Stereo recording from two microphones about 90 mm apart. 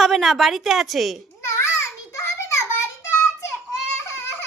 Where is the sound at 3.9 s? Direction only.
30° left (ahead or behind).